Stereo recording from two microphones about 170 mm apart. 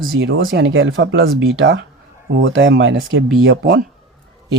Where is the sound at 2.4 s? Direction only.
90° right.